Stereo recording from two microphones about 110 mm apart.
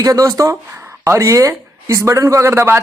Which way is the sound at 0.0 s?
30° right (ahead or behind).